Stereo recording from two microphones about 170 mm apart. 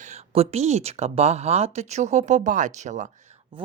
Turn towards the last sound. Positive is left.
turn(degrees=-45)  # may be behind; listen again after turning